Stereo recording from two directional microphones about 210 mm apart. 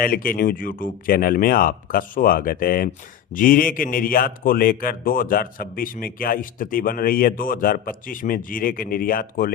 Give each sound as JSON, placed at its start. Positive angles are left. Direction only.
{"t": 0.0, "sound": "speech", "side_deg": 45}